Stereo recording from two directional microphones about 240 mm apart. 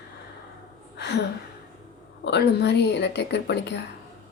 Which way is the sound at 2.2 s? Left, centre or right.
Left.